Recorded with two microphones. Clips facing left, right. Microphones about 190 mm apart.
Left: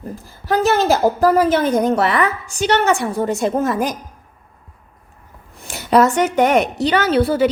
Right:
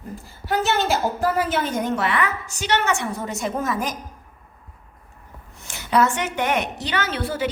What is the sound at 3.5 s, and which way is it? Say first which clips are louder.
Speech: left 6 dB; 60° left (ahead or behind).